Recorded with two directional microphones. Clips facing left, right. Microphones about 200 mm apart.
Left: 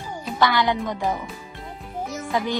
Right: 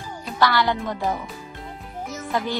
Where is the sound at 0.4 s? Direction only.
15° left (ahead or behind).